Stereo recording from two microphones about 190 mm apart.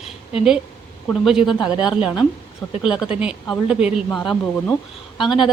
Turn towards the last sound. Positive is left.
turn(degrees=0)  # may be behind; listen again after turning